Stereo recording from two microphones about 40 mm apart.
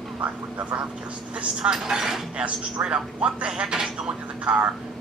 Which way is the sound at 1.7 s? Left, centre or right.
Centre.